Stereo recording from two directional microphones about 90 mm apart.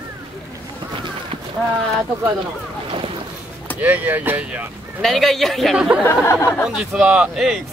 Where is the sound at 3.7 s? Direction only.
20° right (ahead or behind).